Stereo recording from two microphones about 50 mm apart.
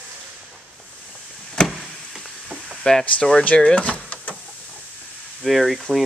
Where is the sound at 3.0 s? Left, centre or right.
Left.